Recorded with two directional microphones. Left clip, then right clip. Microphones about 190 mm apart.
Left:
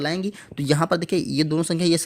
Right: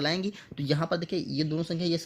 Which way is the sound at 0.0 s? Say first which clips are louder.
Left 3 dB; 25° left (ahead or behind).